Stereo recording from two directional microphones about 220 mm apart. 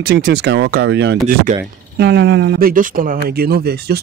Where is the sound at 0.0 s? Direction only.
45° right (ahead or behind).